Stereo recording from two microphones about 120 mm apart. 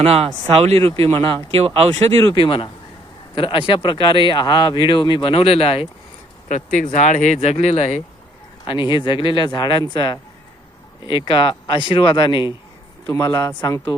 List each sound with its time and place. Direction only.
0.0 s speech: 55° right (ahead or behind)
1.9 s speech: 65° right (ahead or behind)
2.3 s speech: 40° left (ahead or behind)
6.5 s speech: 90° left; by 8.0 s 65° left (ahead or behind)
8.9 s speech: 40° left (ahead or behind)